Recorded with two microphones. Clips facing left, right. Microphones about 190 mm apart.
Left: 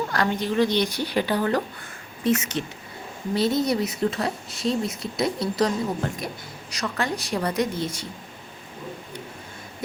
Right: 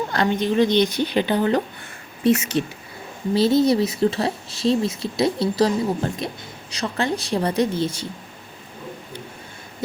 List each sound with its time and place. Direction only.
0.1 s a woman's voice: 20° right (ahead or behind)
3.3 s a woman's voice: 30° right (ahead or behind)